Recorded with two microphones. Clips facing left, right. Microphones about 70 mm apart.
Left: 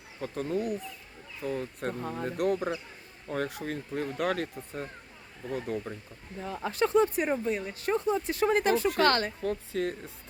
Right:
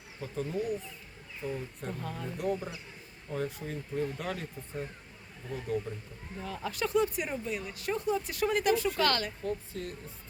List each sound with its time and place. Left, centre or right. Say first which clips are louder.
0.2 s speech: left 3 dB; left
1.5 s speech: left 5 dB; left
1.9 s speech: left 2 dB; left
2.2 s speech: left 5 dB; left
6.4 s speech: left 5 dB; left
9.4 s a woman's voice: left 4 dB; left